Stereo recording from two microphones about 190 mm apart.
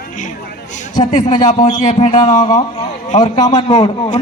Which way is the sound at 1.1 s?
40° left (ahead or behind).